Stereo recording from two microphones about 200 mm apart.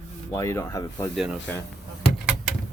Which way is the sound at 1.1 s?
5° right (ahead or behind).